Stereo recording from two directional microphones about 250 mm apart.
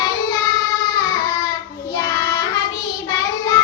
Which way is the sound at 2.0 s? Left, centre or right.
Centre.